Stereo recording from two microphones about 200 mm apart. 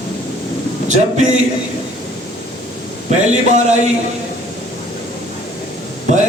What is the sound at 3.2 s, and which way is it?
Speech, 35° right (ahead or behind).